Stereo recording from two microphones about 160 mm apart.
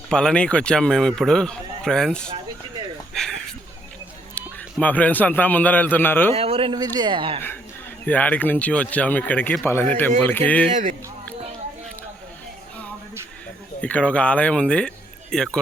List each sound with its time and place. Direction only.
0.1 s a man's voice: 5° left (ahead or behind)
3.1 s a sound: 5° left (ahead or behind)
4.4 s a man's voice: 10° left (ahead or behind)
6.3 s a man's voice: 35° right (ahead or behind)
8.0 s speech: 10° left (ahead or behind)
10.7 s speech: 50° right (ahead or behind)
13.8 s speech: 10° left (ahead or behind)